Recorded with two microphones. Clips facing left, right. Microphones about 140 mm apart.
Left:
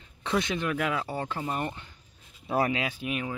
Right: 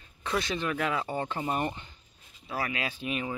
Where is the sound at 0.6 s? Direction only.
5° left (ahead or behind).